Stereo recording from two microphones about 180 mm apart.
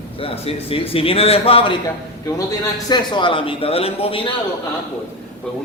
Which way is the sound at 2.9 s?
25° left (ahead or behind).